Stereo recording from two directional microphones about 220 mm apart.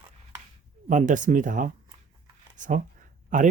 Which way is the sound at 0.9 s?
35° right (ahead or behind).